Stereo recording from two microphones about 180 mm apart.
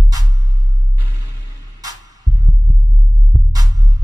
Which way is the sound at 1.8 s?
20° right (ahead or behind).